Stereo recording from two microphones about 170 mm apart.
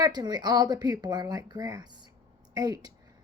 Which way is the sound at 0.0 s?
25° right (ahead or behind).